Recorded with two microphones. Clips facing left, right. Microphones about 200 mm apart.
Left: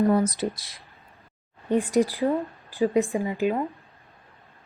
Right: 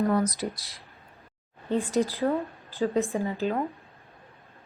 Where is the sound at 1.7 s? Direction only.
15° left (ahead or behind).